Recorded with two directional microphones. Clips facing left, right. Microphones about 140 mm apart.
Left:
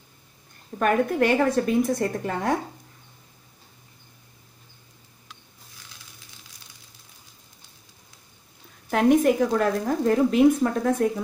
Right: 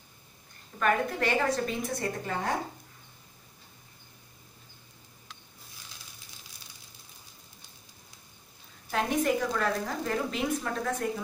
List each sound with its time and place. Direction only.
0.7 s speech: 50° left (ahead or behind)
8.9 s speech: 55° left (ahead or behind)